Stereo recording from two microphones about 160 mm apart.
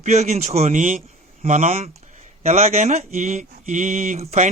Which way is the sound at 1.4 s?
40° right (ahead or behind).